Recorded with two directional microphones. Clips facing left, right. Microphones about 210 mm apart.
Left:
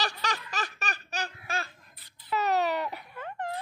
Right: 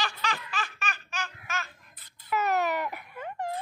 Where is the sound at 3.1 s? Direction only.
10° right (ahead or behind).